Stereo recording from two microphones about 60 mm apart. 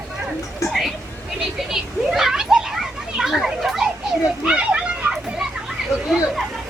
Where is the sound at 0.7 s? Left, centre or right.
Centre.